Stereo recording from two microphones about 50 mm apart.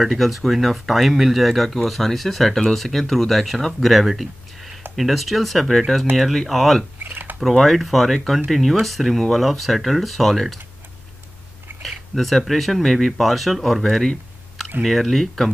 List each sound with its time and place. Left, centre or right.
0.0 s speech: centre
7.0 s drip: right
7.3 s speech: centre
11.8 s speech: centre